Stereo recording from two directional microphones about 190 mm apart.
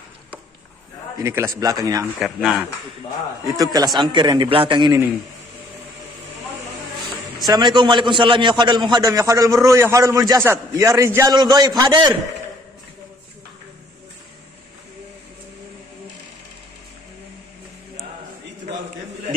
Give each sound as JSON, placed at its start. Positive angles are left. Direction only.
{"t": 1.2, "sound": "a man's voice", "side_deg": -15}
{"t": 2.1, "sound": "speech", "side_deg": 0}
{"t": 3.4, "sound": "a man's voice", "side_deg": -20}
{"t": 7.3, "sound": "a man's voice", "side_deg": -20}